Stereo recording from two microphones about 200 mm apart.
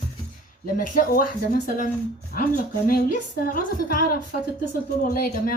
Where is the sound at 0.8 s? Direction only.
45° left (ahead or behind).